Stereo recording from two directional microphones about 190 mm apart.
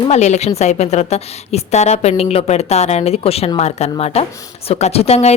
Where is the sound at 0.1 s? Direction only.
35° left (ahead or behind).